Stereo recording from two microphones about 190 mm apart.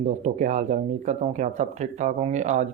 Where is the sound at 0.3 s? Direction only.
40° right (ahead or behind).